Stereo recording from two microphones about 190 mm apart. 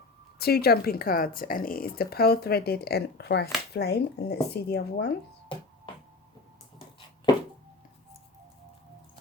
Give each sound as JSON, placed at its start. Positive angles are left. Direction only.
{"t": 0.3, "sound": "speech", "side_deg": 55}